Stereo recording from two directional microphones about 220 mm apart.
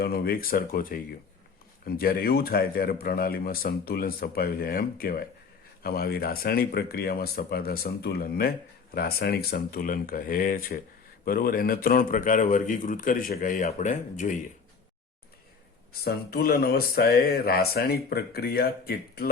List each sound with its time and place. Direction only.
0.0 s a man's voice: 45° left (ahead or behind)
16.0 s speech: 45° left (ahead or behind)